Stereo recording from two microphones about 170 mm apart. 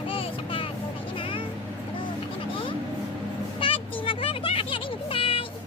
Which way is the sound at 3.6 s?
30° left (ahead or behind).